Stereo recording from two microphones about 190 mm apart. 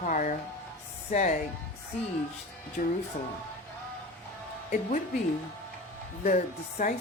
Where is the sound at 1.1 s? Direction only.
40° left (ahead or behind).